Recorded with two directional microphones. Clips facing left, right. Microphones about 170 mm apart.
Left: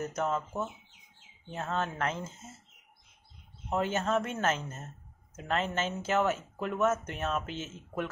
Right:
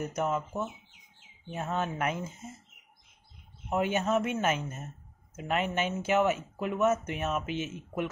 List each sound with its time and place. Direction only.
0.0 s speech: 10° right (ahead or behind)
1.5 s speech: 10° right (ahead or behind)
3.7 s a woman's voice: 10° right (ahead or behind)